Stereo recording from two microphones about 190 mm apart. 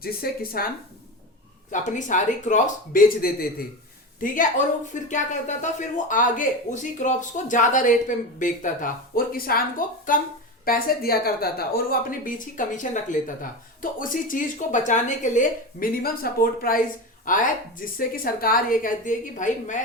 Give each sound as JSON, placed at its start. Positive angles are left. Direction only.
{"t": 0.0, "sound": "speech", "side_deg": 50}
{"t": 1.7, "sound": "speech", "side_deg": 40}
{"t": 5.0, "sound": "speech", "side_deg": 40}